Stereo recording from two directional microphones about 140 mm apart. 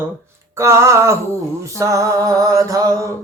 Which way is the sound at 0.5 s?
20° right (ahead or behind).